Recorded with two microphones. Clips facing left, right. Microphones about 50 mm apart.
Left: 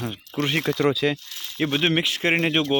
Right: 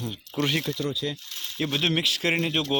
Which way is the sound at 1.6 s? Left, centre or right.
Left.